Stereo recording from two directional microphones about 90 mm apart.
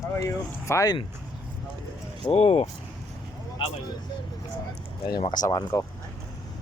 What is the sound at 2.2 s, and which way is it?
Speech, 50° left (ahead or behind).